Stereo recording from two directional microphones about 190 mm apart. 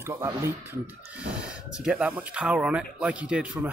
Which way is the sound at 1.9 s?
5° right (ahead or behind).